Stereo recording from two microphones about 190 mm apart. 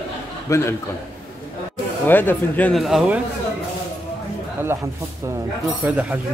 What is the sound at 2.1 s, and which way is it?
A man's voice, 10° left (ahead or behind).